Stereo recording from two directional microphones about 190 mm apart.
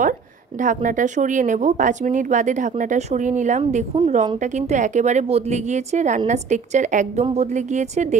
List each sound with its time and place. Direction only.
0.6 s speech: 40° right (ahead or behind)